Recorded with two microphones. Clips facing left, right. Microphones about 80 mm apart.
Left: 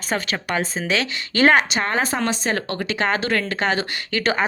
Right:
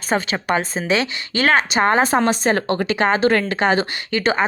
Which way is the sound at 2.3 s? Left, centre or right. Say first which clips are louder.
Right 5 dB; right.